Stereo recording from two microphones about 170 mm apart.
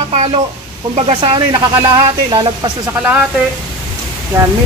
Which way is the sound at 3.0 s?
10° right (ahead or behind).